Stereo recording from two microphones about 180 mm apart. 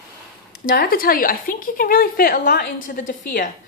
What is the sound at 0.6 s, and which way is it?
A woman's voice, 55° left (ahead or behind).